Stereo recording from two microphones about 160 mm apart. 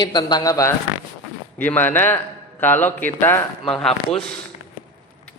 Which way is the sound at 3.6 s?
Centre (ahead or behind).